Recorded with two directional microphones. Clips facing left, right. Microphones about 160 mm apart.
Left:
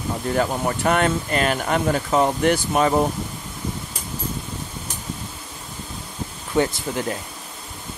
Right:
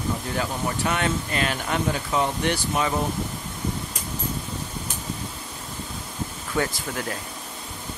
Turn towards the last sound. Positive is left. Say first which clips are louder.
# left 4 dB
turn(degrees=25)  # may be behind; listen again after turning